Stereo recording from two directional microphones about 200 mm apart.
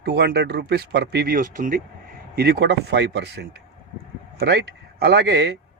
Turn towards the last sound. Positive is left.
turn(degrees=-55)  # may be behind; listen again after turning